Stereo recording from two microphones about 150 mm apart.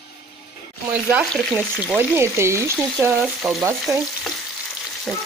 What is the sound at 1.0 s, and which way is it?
Speech, 10° right (ahead or behind).